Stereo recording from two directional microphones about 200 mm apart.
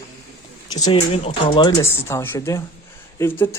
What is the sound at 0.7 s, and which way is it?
Speech, 20° left (ahead or behind).